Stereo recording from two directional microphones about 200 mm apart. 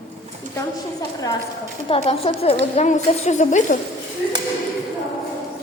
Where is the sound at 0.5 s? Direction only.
20° left (ahead or behind).